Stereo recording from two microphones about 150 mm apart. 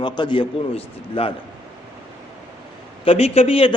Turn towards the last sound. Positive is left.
turn(degrees=40)  # may be behind; listen again after turning